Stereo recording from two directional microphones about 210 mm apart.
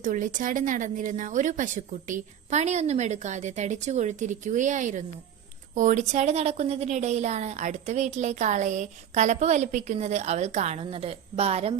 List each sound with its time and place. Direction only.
0.0 s a woman's voice: 40° right (ahead or behind)